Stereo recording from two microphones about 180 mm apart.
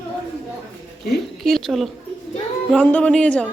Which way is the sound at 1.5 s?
Centre (ahead or behind).